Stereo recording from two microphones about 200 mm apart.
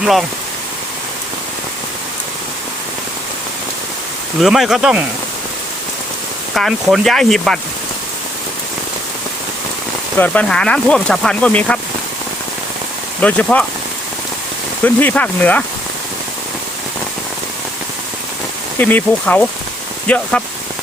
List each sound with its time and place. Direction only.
0.0 s speech: centre (ahead or behind)
4.4 s speech: centre (ahead or behind)
6.5 s speech: centre (ahead or behind)
10.2 s speech: 5° left (ahead or behind)
13.2 s speech: 5° left (ahead or behind)
14.8 s speech: 10° left (ahead or behind)
18.8 s speech: 10° left (ahead or behind)